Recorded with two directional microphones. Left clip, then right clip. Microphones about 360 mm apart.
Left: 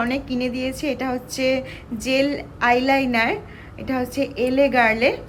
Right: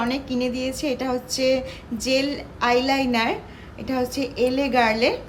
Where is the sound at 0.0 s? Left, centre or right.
Centre.